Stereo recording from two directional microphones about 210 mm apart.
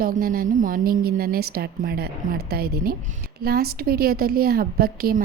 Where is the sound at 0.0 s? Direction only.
45° right (ahead or behind).